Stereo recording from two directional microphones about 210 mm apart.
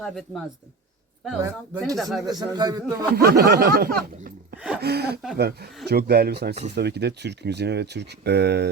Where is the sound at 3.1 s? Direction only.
45° right (ahead or behind).